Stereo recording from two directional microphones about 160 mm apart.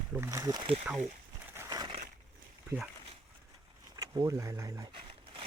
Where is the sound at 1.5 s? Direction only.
25° right (ahead or behind).